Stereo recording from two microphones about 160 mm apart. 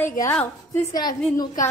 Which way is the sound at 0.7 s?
25° left (ahead or behind).